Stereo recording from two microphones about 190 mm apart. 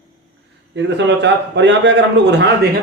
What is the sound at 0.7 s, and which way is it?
A man's voice, 70° right (ahead or behind).